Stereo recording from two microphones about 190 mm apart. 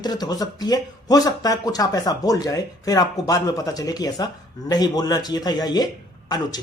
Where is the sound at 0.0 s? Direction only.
20° left (ahead or behind).